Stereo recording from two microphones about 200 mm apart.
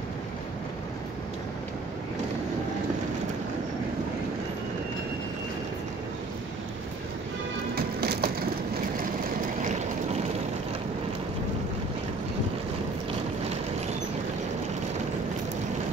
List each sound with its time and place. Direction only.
7.7 s music: 50° right (ahead or behind)